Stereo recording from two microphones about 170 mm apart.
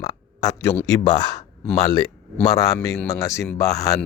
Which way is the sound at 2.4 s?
20° left (ahead or behind).